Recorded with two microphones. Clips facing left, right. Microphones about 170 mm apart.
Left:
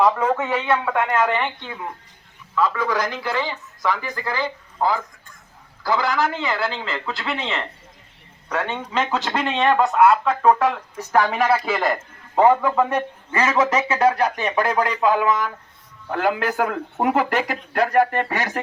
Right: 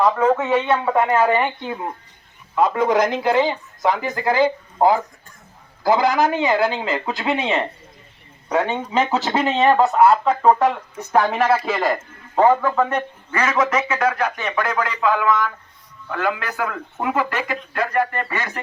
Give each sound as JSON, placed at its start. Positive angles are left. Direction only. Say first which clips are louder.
{"t": 0.0, "sound": "speech", "louder": "right 2 dB", "side_deg": 0}
{"t": 1.2, "sound": "speech", "louder": "right 4 dB", "side_deg": -40}
{"t": 2.6, "sound": "speech", "louder": "right 5 dB", "side_deg": -20}
{"t": 12.4, "sound": "a man's voice", "louder": "even", "side_deg": 10}